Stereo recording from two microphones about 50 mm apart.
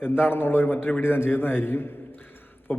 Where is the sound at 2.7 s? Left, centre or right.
Left.